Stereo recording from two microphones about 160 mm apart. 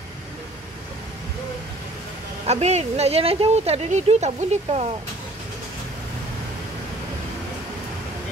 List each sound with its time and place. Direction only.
2.4 s speech: 45° right (ahead or behind)